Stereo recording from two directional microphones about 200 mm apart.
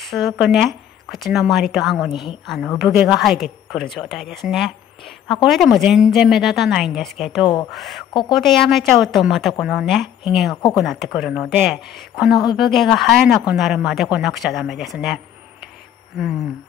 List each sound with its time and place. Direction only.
0.0 s speech: centre (ahead or behind)